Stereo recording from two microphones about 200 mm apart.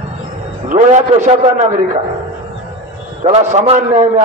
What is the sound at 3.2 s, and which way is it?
A man's voice, 35° right (ahead or behind).